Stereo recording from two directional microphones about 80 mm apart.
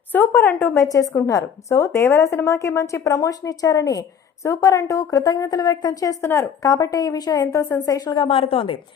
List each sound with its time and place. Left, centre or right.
0.1 s a woman's voice: left
0.9 s a woman's voice: left
6.0 s a woman's voice: left
7.5 s a woman's voice: left
7.9 s a woman's voice: left
8.1 s speech: left